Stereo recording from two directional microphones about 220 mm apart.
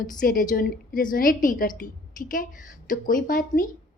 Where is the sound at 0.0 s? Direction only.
35° left (ahead or behind).